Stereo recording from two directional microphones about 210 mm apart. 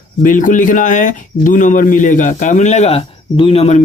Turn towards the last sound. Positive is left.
turn(degrees=30)  # may be behind; listen again after turning